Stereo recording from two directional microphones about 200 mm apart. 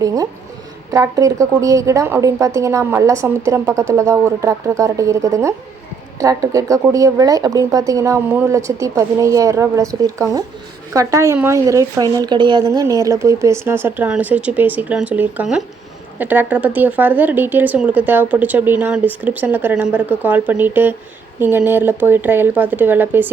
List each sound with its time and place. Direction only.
0.0 s speech: 15° right (ahead or behind)